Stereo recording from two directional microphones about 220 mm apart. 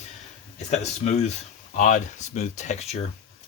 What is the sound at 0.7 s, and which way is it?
Speech, 30° left (ahead or behind).